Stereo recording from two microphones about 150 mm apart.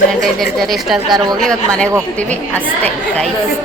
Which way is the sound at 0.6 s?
Centre (ahead or behind).